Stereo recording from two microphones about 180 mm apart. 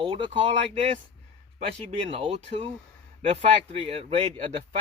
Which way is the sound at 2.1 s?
35° right (ahead or behind).